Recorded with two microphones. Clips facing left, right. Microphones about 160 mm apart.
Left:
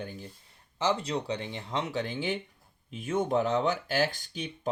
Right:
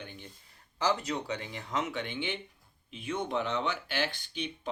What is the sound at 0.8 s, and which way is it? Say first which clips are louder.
Speech: left 2 dB; 25° left (ahead or behind).